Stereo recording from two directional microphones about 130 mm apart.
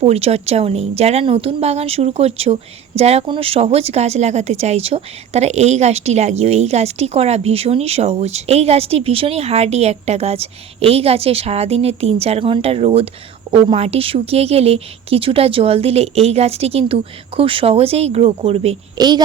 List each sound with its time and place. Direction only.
0.0 s a woman's voice: 50° right (ahead or behind)
18.9 s a woman's voice: 30° right (ahead or behind)